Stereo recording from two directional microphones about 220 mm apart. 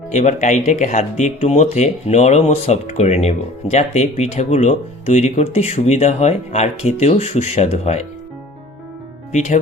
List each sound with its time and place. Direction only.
0.1 s speech: 30° left (ahead or behind)
9.3 s speech: 30° left (ahead or behind)